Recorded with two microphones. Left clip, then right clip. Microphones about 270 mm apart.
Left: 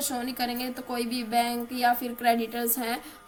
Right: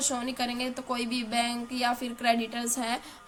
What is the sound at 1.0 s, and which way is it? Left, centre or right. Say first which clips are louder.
Speech: left 1 dB; right.